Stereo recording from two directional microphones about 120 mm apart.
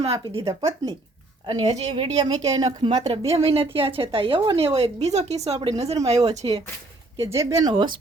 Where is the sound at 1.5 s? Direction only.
60° right (ahead or behind); by 3.0 s 35° right (ahead or behind).